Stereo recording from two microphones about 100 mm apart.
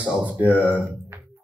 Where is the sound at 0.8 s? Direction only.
20° right (ahead or behind).